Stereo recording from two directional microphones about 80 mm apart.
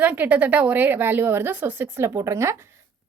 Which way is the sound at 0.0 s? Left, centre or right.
Right.